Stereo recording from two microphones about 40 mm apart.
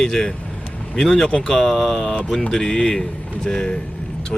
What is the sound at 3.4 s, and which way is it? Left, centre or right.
Vehicle, centre.